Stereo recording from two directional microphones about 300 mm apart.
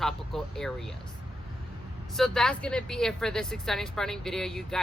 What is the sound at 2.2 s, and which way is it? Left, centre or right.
Speech, centre.